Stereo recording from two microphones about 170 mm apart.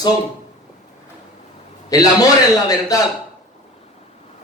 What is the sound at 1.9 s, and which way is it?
A man's voice, 20° left (ahead or behind).